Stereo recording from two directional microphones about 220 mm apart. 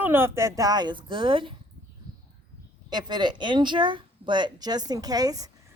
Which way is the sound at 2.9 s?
20° right (ahead or behind).